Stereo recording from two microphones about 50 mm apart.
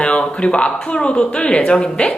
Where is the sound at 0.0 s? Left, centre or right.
Left.